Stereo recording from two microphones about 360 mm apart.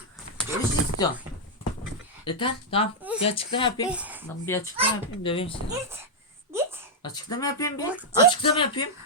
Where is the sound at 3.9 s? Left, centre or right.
Centre.